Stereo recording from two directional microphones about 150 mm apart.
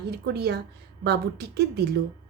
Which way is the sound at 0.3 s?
90° right.